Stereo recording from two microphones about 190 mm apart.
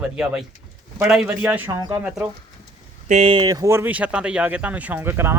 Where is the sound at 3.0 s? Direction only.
35° right (ahead or behind).